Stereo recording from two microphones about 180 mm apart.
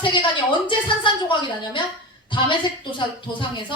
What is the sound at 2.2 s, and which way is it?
A woman's voice, 25° left (ahead or behind).